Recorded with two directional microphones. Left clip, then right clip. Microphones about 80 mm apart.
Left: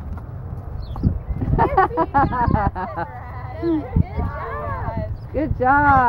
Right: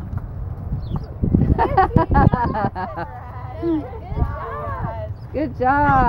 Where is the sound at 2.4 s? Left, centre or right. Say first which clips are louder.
Left 1 dB; right.